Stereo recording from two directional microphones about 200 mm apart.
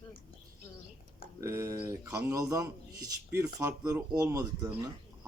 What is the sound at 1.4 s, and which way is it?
Speech, 15° right (ahead or behind).